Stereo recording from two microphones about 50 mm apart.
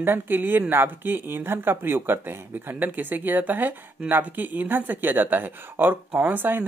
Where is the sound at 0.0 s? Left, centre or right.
Right.